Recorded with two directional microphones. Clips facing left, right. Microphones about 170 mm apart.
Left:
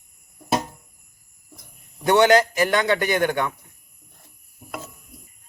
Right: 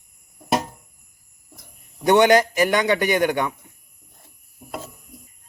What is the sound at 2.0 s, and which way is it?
A man's voice, 15° right (ahead or behind).